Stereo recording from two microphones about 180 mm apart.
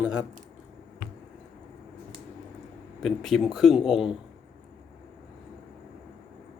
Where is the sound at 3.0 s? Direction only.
Centre (ahead or behind).